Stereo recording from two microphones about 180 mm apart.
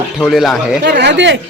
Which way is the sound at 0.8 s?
65° right (ahead or behind).